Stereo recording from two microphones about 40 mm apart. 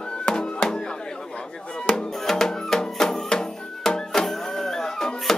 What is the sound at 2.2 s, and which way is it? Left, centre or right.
Music, centre.